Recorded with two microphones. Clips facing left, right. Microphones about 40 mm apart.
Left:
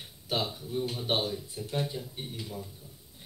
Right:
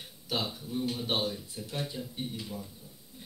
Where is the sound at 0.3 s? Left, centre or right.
Centre.